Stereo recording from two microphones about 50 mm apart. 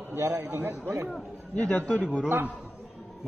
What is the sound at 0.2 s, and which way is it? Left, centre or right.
Speech, right.